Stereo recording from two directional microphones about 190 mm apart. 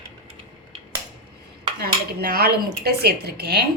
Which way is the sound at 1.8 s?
55° right (ahead or behind).